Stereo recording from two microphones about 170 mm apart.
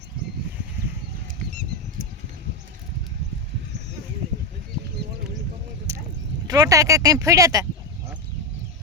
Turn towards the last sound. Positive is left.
turn(degrees=-20)  # may be behind; listen again after turning